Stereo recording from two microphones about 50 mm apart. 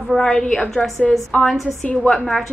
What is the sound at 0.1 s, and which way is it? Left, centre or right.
A woman's voice, centre.